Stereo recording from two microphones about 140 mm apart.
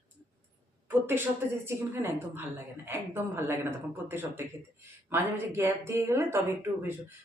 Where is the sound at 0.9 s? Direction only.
15° right (ahead or behind).